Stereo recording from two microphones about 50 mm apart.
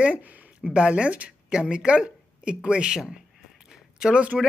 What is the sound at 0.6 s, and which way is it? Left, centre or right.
A man's voice, centre.